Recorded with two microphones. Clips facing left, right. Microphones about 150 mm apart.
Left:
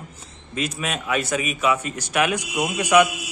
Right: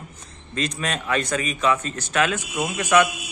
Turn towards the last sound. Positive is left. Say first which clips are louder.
# left 2 dB
turn(degrees=15)  # may be behind; listen again after turning